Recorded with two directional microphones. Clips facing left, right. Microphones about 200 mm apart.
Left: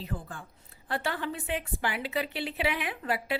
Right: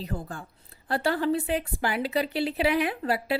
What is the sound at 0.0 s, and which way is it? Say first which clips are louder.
A woman's voice: right 4 dB; 40° right (ahead or behind).